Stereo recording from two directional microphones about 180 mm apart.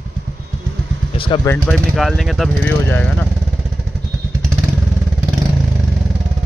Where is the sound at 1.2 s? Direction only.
25° left (ahead or behind).